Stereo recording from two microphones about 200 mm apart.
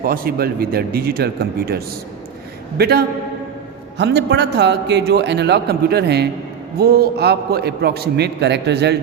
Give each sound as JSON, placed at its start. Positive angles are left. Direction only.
{"t": 0.0, "sound": "a man's voice", "side_deg": -45}